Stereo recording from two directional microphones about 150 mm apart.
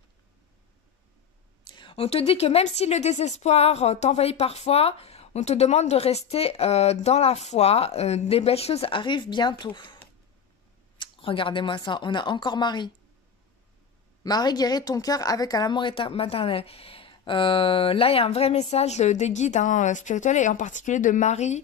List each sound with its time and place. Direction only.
1.6 s a woman's voice: 30° left (ahead or behind)
11.0 s speech: 35° left (ahead or behind)
14.2 s speech: 25° left (ahead or behind); by 21.5 s 50° left (ahead or behind)